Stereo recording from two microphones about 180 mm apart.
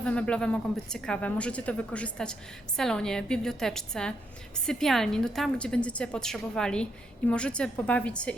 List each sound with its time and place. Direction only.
0.0 s a woman's voice: 5° left (ahead or behind)